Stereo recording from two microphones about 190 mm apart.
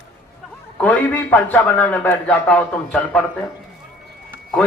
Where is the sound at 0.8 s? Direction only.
10° left (ahead or behind).